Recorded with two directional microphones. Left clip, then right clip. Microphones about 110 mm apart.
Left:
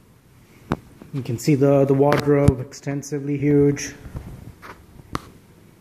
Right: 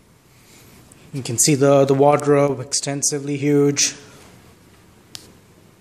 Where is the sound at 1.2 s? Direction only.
15° right (ahead or behind).